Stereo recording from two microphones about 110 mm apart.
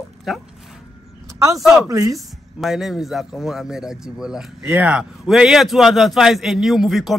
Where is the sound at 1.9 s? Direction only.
30° right (ahead or behind).